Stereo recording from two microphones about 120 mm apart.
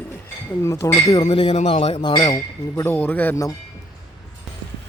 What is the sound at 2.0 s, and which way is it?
Speech, 35° left (ahead or behind).